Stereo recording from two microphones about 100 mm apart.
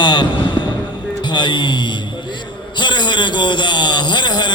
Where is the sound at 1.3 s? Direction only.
50° left (ahead or behind).